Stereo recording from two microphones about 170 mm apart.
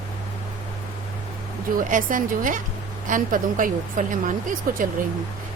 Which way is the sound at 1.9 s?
50° right (ahead or behind).